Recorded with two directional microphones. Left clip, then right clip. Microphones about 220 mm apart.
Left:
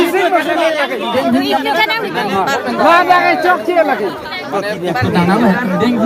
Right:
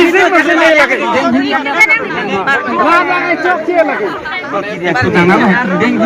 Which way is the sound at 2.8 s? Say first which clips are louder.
Left 4 dB; 45° left (ahead or behind).